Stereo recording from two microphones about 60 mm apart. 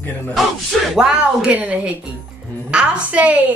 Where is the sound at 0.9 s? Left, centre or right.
Centre.